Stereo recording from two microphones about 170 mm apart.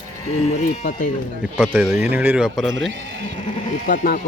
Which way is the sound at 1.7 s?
10° right (ahead or behind).